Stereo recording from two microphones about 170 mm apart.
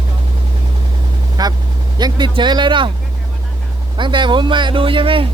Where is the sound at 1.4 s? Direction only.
25° right (ahead or behind).